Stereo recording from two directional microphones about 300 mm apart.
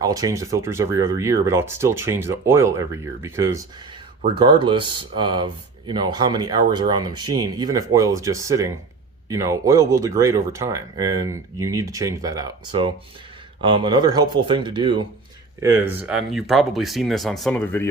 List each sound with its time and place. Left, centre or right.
0.0 s speech: centre